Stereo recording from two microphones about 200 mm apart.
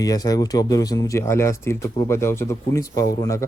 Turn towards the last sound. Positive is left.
turn(degrees=15)  # may be behind; listen again after turning